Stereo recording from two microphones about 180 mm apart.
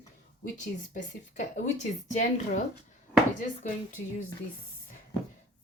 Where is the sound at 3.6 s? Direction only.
45° left (ahead or behind).